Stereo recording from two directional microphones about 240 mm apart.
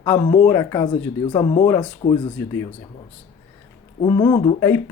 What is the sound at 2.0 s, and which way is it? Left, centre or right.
Speech, left.